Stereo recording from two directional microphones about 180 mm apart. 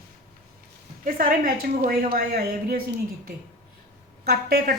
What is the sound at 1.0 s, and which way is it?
A woman's voice, 50° right (ahead or behind).